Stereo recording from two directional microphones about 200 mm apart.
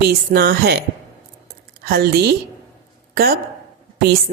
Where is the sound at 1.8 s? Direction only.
50° right (ahead or behind).